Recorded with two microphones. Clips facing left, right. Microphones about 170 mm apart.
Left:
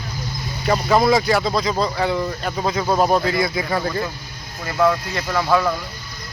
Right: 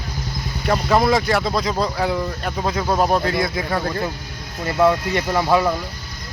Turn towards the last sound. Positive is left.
turn(degrees=-20)  # may be behind; listen again after turning